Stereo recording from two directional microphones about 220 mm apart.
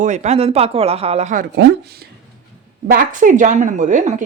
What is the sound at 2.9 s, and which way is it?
Speech, 40° right (ahead or behind).